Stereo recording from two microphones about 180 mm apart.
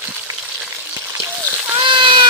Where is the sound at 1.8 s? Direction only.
25° right (ahead or behind).